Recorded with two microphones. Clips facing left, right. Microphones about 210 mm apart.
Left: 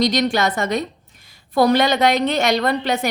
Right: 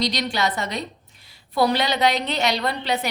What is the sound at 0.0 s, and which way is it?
A woman's voice, 50° left (ahead or behind).